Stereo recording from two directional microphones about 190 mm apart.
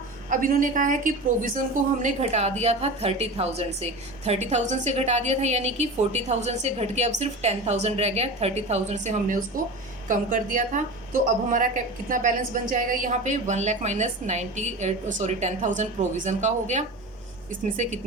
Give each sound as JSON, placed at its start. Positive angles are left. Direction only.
{"t": 0.3, "sound": "a woman's voice", "side_deg": -45}